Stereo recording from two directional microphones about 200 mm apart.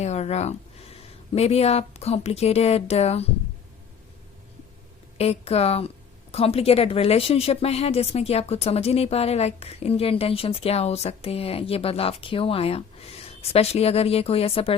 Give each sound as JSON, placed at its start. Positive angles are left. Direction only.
{"t": 0.0, "sound": "speech", "side_deg": 35}
{"t": 5.1, "sound": "a woman's voice", "side_deg": 30}